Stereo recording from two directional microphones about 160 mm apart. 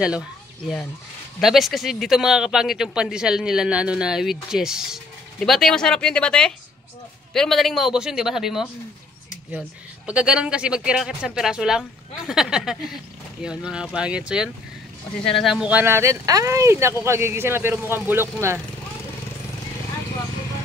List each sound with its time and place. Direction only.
0.0 s a man's voice: 5° right (ahead or behind)
10.0 s a man's voice: 5° right (ahead or behind)